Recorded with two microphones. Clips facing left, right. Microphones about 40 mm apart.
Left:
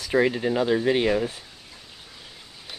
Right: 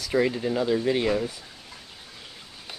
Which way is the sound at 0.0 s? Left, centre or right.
Centre.